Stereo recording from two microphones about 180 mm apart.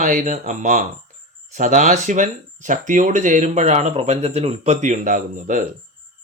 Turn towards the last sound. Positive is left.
turn(degrees=-45)  # may be behind; listen again after turning